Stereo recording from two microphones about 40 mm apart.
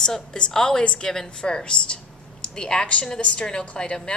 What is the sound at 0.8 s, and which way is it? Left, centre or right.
A woman's voice, left.